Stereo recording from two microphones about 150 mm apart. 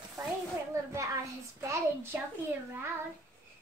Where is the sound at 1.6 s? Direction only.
15° right (ahead or behind).